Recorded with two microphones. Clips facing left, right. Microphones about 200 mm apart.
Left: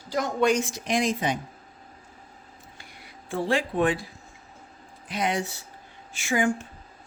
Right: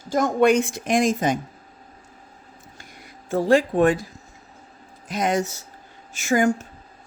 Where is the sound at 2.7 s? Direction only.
45° right (ahead or behind).